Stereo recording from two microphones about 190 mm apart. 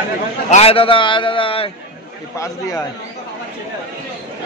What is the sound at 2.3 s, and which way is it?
Speech, 15° left (ahead or behind).